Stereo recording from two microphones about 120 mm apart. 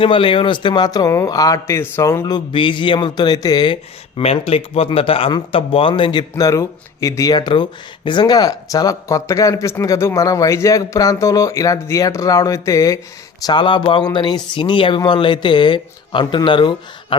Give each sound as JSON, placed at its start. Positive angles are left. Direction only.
{"t": 0.0, "sound": "speech", "side_deg": 45}
{"t": 4.2, "sound": "speech", "side_deg": 55}
{"t": 13.4, "sound": "speech", "side_deg": 40}